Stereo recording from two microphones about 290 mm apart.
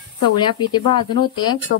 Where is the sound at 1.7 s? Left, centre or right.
Left.